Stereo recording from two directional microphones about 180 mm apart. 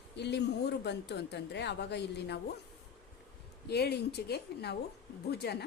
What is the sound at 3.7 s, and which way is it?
A woman's voice, 65° left (ahead or behind).